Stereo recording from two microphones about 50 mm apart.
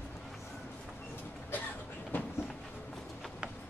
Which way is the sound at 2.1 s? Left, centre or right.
Left.